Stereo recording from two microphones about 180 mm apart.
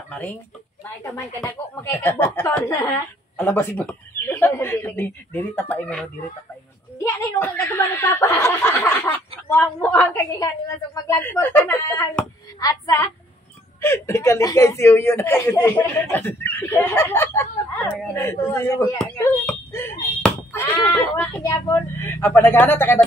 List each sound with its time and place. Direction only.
0.1 s speech: 10° left (ahead or behind)
3.3 s speech: 10° left (ahead or behind)